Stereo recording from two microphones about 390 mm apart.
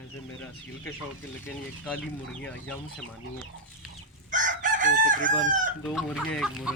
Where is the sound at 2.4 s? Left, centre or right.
Centre.